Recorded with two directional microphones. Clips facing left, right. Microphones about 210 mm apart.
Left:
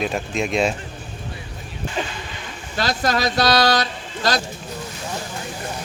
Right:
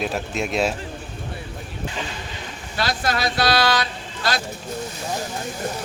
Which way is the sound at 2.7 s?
45° left (ahead or behind).